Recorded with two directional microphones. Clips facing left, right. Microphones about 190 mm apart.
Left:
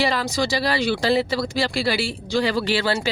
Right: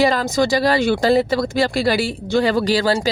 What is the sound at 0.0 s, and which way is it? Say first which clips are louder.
A woman's voice: right 6 dB; 45° right (ahead or behind).